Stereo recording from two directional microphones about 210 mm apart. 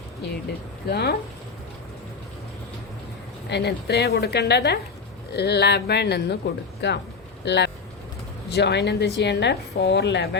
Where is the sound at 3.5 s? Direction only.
55° left (ahead or behind).